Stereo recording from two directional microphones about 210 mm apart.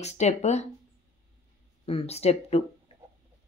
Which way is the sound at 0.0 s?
30° left (ahead or behind).